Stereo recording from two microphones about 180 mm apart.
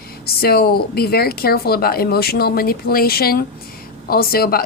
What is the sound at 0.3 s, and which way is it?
A woman's voice, 60° left (ahead or behind).